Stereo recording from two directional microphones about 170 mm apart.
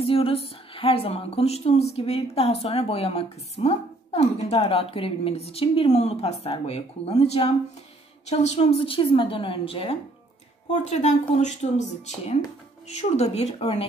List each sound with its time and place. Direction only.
0.0 s a woman's voice: 35° left (ahead or behind)
12.8 s a woman's voice: 40° left (ahead or behind)